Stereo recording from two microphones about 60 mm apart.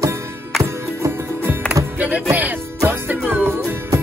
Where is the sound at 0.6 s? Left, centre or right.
Right.